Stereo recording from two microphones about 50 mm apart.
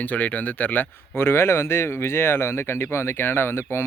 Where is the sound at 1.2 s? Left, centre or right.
Left.